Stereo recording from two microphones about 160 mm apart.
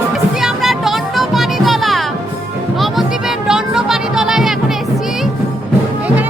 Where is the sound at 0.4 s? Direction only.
Centre (ahead or behind).